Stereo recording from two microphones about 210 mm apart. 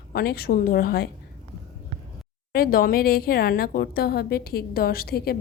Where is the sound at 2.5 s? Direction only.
45° left (ahead or behind).